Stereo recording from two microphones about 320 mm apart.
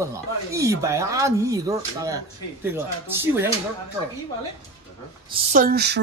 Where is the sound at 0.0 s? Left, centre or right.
Centre.